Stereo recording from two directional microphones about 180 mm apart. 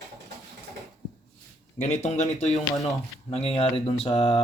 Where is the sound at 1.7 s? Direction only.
40° left (ahead or behind).